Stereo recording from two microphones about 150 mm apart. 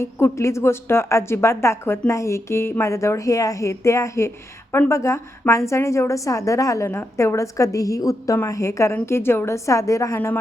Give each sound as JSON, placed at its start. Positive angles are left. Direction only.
{"t": 0.0, "sound": "a woman's voice", "side_deg": 20}